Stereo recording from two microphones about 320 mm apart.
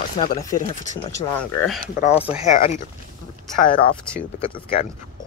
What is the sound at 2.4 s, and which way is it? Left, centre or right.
Speech, left.